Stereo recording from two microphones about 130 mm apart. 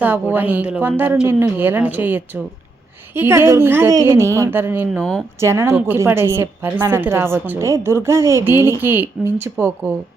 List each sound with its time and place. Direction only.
0.0 s a woman's voice: 15° right (ahead or behind)